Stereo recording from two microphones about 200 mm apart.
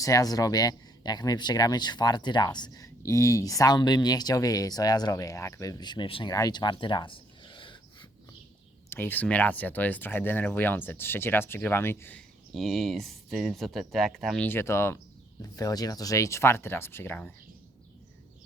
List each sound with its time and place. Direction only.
0.0 s speech: 15° left (ahead or behind)
8.9 s speech: 10° left (ahead or behind)